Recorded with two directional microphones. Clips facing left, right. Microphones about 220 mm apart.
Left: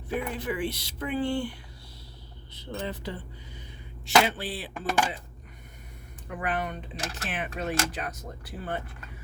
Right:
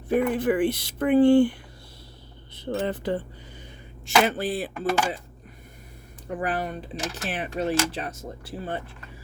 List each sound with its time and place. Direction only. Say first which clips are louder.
0.1 s speech: right 9 dB; 50° right (ahead or behind)
2.6 s speech: right 7 dB; 55° right (ahead or behind)
6.2 s speech: right 3 dB; 35° right (ahead or behind)